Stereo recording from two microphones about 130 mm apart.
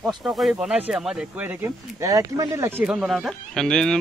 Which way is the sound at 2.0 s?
25° right (ahead or behind).